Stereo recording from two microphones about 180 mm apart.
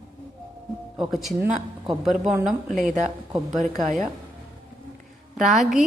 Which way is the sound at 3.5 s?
45° right (ahead or behind).